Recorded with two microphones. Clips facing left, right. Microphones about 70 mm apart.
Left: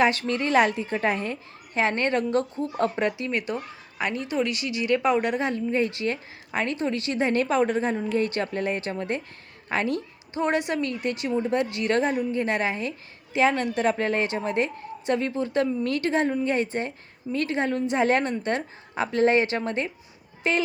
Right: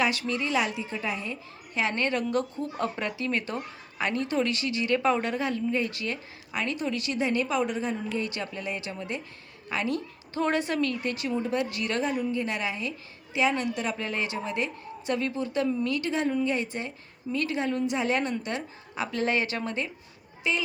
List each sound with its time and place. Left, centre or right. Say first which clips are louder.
0.0 s a woman's voice: left 5 dB; left
1.8 s a woman's voice: left 4 dB; left
2.9 s a woman's voice: left 4 dB; left
10.3 s a woman's voice: left 2 dB; left
20.4 s a woman's voice: left 4 dB; left